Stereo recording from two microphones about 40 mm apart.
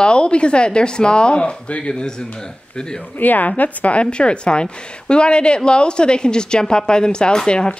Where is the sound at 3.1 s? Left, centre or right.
Left.